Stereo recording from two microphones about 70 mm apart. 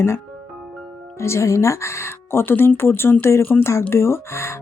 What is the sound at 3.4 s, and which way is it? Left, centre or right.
Speech, left.